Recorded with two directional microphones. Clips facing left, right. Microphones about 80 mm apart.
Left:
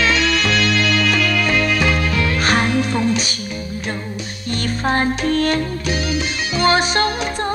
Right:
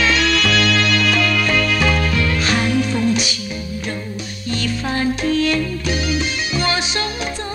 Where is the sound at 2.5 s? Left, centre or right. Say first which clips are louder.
Left 2 dB; left.